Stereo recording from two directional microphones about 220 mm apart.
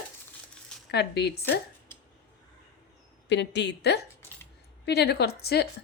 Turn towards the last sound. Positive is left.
turn(degrees=45)  # may be behind; listen again after turning